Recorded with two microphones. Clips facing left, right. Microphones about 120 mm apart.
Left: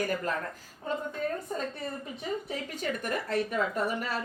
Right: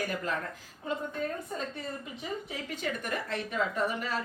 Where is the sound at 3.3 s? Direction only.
45° left (ahead or behind).